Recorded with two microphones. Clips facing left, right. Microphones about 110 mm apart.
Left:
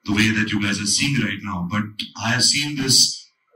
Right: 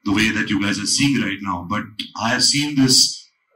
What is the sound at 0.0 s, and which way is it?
A man's voice, 35° right (ahead or behind).